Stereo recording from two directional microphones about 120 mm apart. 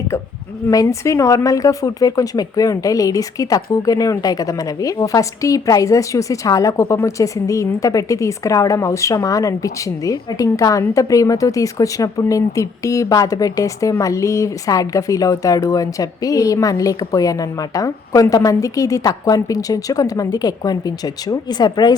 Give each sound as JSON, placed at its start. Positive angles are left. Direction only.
{"t": 0.7, "sound": "speech", "side_deg": 30}